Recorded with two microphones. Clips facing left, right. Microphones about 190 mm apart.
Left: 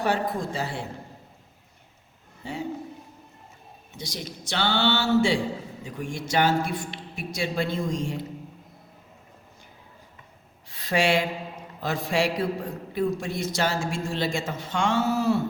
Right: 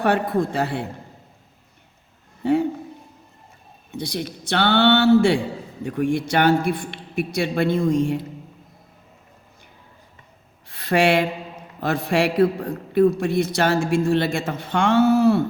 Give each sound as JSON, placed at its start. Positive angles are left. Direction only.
{"t": 0.0, "sound": "a man's voice", "side_deg": -60}
{"t": 2.4, "sound": "a man's voice", "side_deg": -60}
{"t": 3.9, "sound": "a man's voice", "side_deg": -60}
{"t": 10.7, "sound": "a man's voice", "side_deg": -60}